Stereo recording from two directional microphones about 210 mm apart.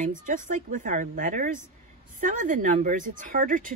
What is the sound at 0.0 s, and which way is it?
Speech, 40° right (ahead or behind).